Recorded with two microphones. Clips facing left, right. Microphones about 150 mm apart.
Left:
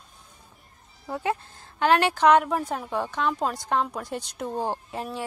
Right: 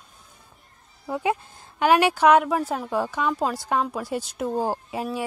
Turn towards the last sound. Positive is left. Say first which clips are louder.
# right 4 dB
turn(degrees=-10)  # may be behind; listen again after turning